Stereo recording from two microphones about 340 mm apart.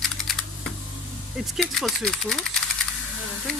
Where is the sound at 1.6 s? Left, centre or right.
Centre.